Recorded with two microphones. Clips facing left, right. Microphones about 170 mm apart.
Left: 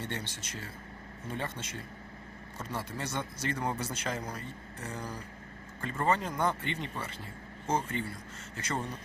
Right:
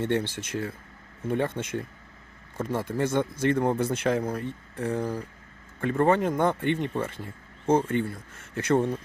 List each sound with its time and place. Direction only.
0.0 s speech: 55° right (ahead or behind)